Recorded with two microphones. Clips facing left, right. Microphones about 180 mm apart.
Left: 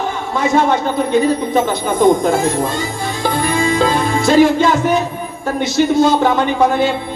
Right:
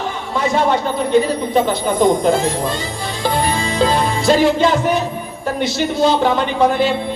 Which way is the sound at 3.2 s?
50° left (ahead or behind).